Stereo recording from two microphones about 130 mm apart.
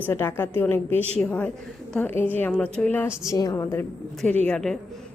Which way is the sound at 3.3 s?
25° left (ahead or behind).